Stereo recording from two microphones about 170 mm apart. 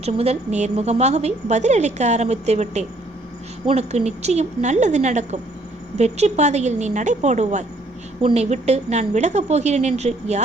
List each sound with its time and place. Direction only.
0.0 s a woman's voice: 40° right (ahead or behind)